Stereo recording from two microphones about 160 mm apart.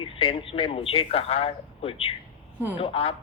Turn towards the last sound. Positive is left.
turn(degrees=35)  # may be behind; listen again after turning